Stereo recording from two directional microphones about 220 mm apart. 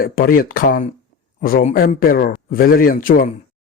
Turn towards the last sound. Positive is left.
turn(degrees=40)  # may be behind; listen again after turning